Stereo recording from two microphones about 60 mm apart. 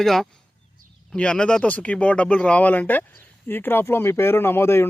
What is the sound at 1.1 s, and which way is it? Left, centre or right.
Speech, centre.